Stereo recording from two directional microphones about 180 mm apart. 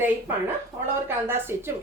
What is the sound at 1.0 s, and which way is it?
Speech, 15° right (ahead or behind).